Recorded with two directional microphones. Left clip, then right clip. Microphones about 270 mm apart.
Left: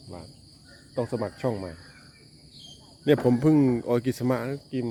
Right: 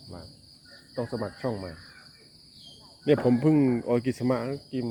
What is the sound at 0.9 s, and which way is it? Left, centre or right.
Speech, left.